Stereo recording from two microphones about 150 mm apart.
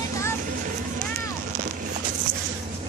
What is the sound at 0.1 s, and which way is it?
Vehicle, 20° left (ahead or behind).